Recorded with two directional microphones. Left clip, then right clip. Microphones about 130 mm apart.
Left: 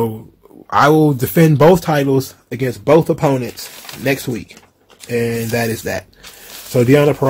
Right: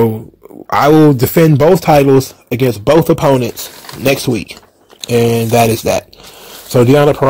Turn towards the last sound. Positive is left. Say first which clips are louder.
# right 3 dB
turn(degrees=-55)  # may be behind; listen again after turning